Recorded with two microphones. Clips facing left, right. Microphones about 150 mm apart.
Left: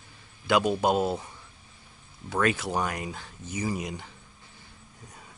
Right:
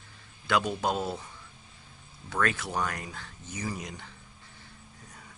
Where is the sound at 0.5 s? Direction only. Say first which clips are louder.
Left 5 dB; 15° left (ahead or behind).